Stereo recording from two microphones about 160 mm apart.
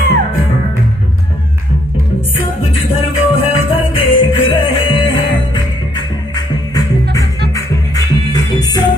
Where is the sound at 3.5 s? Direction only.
35° left (ahead or behind).